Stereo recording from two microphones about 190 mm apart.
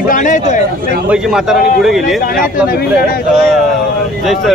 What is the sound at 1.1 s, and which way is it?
Speech, 5° right (ahead or behind).